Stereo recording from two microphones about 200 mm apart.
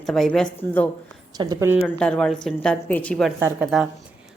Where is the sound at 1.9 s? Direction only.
5° left (ahead or behind).